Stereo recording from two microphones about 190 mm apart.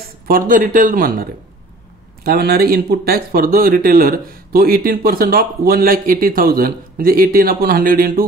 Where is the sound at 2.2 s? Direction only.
55° right (ahead or behind).